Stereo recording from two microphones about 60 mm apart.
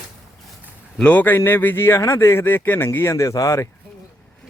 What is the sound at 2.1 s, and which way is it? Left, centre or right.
Speech, left.